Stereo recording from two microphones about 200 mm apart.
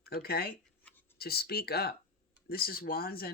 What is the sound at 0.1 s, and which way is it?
Speech, 50° left (ahead or behind).